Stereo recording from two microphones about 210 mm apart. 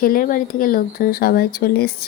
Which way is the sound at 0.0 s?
45° left (ahead or behind).